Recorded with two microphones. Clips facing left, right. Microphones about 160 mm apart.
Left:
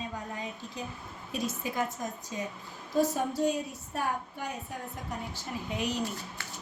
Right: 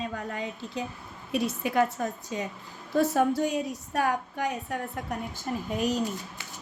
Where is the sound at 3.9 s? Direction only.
80° right.